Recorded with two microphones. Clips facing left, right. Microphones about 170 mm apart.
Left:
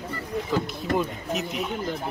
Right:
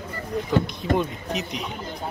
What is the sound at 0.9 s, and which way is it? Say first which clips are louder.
Speech: right 1 dB; 5° left (ahead or behind).